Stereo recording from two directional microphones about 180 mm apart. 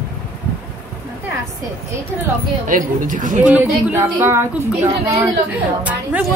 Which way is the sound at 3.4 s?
10° right (ahead or behind).